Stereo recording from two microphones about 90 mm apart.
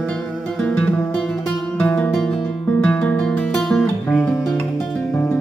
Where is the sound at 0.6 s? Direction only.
15° left (ahead or behind).